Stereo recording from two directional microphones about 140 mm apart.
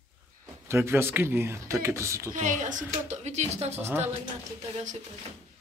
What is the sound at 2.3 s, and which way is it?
A woman's voice, 65° right (ahead or behind).